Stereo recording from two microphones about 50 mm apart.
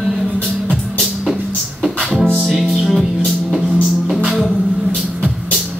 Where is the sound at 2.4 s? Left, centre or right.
Centre.